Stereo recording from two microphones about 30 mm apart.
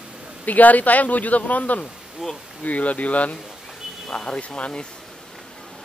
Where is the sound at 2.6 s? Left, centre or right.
Left.